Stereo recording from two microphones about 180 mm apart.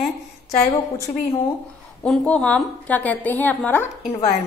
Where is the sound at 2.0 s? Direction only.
5° left (ahead or behind).